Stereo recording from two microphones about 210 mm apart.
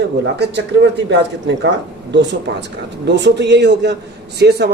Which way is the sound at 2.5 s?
60° right (ahead or behind).